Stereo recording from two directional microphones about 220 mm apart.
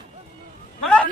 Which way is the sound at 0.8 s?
5° left (ahead or behind).